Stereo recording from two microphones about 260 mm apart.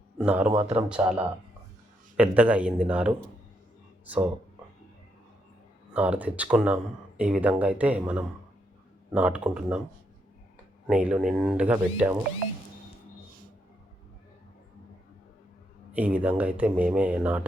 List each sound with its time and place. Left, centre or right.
0.2 s speech: centre
0.5 s a man's voice: right
0.9 s speech: centre
5.9 s speech: centre
10.8 s speech: centre
15.9 s speech: centre